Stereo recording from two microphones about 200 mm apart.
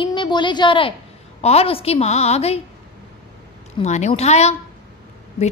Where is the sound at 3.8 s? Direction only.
35° left (ahead or behind).